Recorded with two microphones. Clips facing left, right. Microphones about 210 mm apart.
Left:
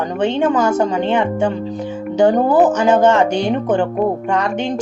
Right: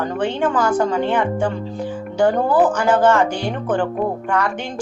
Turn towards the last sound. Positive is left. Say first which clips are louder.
# left 5 dB
turn(degrees=20)  # may be behind; listen again after turning